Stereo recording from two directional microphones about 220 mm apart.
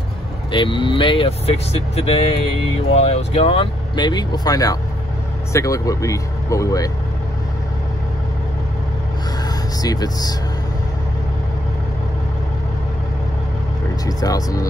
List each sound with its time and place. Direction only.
0.5 s speech: 20° left (ahead or behind)
9.8 s speech: 15° left (ahead or behind)
14.0 s speech: 15° left (ahead or behind)